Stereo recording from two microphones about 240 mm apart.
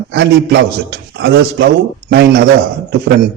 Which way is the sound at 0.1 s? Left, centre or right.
Right.